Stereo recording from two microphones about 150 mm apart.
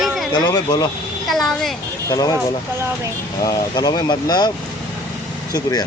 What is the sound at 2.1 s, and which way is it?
Speech, 25° left (ahead or behind).